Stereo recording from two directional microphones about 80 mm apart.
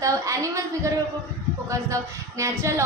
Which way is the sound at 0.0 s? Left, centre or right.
Right.